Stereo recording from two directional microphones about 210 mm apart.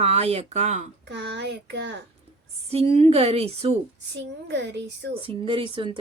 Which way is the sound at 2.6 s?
30° right (ahead or behind).